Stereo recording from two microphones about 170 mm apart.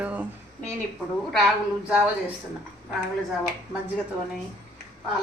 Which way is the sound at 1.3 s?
Centre (ahead or behind).